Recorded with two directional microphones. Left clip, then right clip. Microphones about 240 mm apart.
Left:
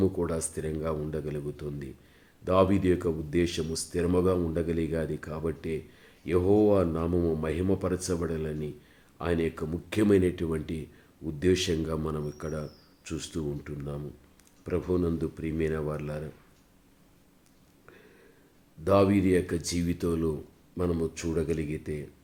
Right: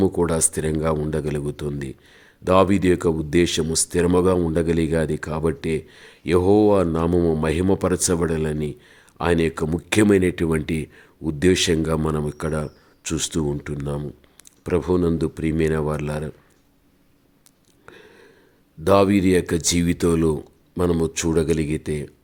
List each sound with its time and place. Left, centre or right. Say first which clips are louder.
0.0 s a man's voice: right 8 dB; right
17.8 s a sound: right 9 dB; right
18.9 s a man's voice: right 7 dB; right